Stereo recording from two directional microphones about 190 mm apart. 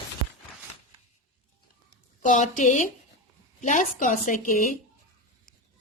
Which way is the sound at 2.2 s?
40° left (ahead or behind).